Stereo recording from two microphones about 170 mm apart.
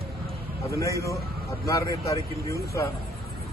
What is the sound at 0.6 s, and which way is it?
Speech, 20° left (ahead or behind).